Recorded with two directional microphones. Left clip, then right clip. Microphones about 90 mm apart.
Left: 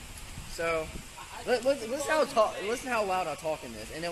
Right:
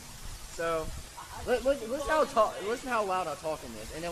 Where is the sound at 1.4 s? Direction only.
5° right (ahead or behind).